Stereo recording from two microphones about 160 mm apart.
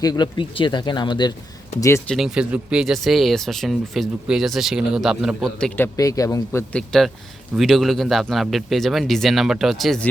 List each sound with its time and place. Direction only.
0.0 s speech: 25° left (ahead or behind)
2.0 s speech: centre (ahead or behind); by 6.7 s 20° left (ahead or behind)
6.7 s speech: 5° left (ahead or behind)